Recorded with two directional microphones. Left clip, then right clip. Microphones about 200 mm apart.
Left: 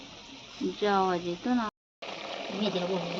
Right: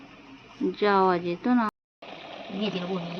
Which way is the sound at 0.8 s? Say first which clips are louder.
Right 5 dB; 30° right (ahead or behind).